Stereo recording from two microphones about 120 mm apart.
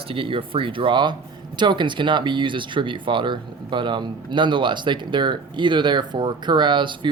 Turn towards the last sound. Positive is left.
turn(degrees=-40)  # may be behind; listen again after turning